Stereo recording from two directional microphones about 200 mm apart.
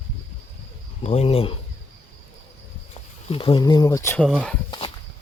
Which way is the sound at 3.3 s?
25° left (ahead or behind).